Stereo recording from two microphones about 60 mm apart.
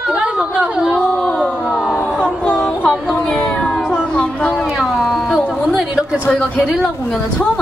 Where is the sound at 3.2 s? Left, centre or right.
Centre.